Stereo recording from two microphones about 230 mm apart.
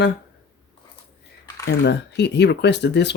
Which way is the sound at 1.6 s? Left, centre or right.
Left.